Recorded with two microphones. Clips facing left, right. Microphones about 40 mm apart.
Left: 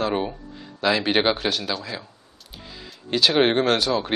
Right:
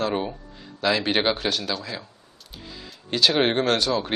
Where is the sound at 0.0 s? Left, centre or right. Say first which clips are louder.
Left 1 dB; centre.